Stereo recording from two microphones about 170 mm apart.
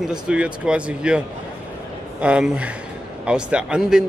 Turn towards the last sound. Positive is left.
turn(degrees=-5)  # may be behind; listen again after turning